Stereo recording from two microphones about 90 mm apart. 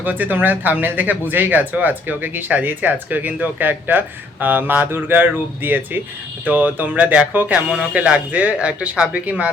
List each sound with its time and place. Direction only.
0.0 s speech: 20° right (ahead or behind)